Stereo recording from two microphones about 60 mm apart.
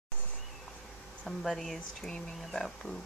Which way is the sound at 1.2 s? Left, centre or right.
Centre.